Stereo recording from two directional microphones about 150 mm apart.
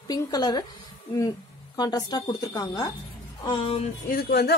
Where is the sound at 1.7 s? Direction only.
25° left (ahead or behind).